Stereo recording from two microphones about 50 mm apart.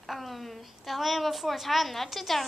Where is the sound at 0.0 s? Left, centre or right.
Centre.